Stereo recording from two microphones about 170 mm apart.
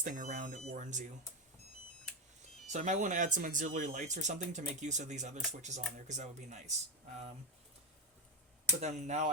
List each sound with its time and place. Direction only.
0.0 s speech: 50° right (ahead or behind)
2.6 s speech: 45° right (ahead or behind)
8.8 s speech: 45° right (ahead or behind)